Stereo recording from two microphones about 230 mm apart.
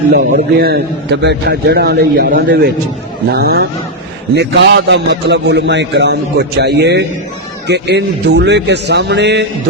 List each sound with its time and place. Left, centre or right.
0.1 s a man's voice: right